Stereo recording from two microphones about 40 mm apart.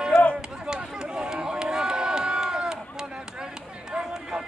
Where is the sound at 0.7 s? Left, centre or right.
Centre.